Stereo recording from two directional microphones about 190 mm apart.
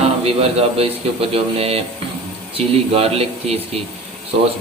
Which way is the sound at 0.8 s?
30° right (ahead or behind).